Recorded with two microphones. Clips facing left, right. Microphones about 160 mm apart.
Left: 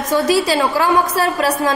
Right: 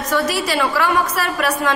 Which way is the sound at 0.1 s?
30° left (ahead or behind).